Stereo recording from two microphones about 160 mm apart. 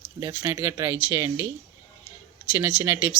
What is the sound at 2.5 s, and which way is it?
Speech, 15° right (ahead or behind).